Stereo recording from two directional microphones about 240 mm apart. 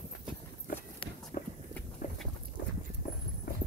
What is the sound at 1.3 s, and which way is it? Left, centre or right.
Walk, left.